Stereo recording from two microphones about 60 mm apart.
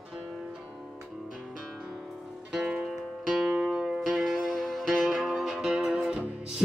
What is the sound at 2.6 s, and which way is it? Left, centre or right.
Music, centre.